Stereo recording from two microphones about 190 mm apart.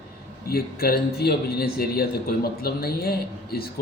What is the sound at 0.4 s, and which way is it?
A man's voice, 55° left (ahead or behind).